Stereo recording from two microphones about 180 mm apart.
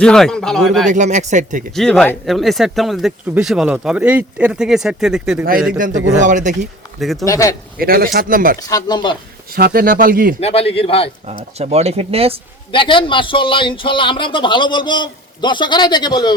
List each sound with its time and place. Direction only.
0.0 s speech: 5° left (ahead or behind)
0.9 s speech: 40° right (ahead or behind)
1.7 s speech: centre (ahead or behind)
5.7 s speech: 50° right (ahead or behind)
7.0 s speech: centre (ahead or behind)
7.3 s a man's voice: 20° left (ahead or behind)
7.8 s speech: 55° right (ahead or behind)
8.6 s a man's voice: 20° left (ahead or behind)
9.5 s speech: 55° right (ahead or behind)
10.4 s a man's voice: 35° left (ahead or behind)
11.5 s speech: 35° right (ahead or behind)
12.7 s a man's voice: 30° left (ahead or behind)